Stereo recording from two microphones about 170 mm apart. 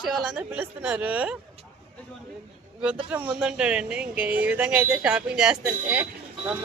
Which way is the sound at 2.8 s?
5° right (ahead or behind).